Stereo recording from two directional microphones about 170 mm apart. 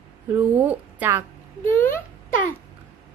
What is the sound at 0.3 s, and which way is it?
Speech, 10° right (ahead or behind).